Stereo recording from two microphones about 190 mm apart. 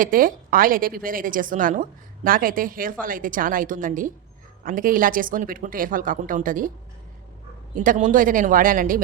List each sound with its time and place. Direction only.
0.0 s a woman's voice: 45° right (ahead or behind)
7.9 s a woman's voice: 45° right (ahead or behind)